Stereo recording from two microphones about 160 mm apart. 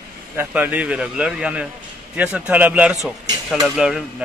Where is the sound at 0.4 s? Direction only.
10° right (ahead or behind).